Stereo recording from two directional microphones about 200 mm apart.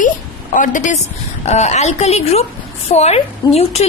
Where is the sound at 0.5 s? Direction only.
40° left (ahead or behind).